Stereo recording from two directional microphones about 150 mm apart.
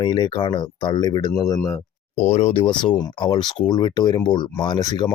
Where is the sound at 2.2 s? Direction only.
50° left (ahead or behind).